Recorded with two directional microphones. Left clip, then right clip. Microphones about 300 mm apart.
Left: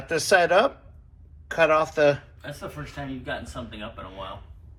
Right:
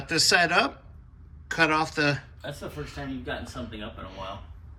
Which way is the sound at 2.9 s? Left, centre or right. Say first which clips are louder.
Left 2 dB; centre.